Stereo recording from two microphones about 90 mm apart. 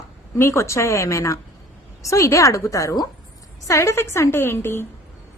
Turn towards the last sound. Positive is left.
turn(degrees=30)  # may be behind; listen again after turning